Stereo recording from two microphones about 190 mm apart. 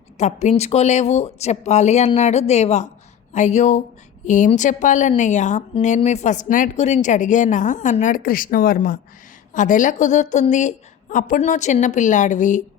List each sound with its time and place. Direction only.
0.2 s a woman's voice: 35° left (ahead or behind)